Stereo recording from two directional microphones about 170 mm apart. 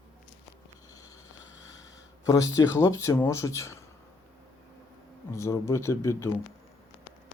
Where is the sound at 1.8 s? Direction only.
20° left (ahead or behind).